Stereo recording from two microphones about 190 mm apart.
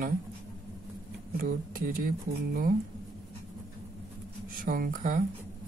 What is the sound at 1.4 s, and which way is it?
Speech, 45° right (ahead or behind).